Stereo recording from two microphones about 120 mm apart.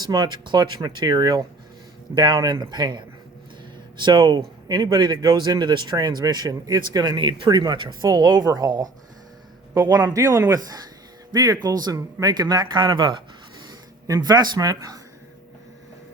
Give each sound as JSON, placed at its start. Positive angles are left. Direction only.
{"t": 0.0, "sound": "speech", "side_deg": -35}
{"t": 9.9, "sound": "speech", "side_deg": -30}